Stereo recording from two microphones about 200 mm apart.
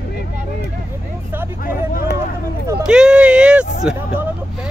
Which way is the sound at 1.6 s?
45° left (ahead or behind).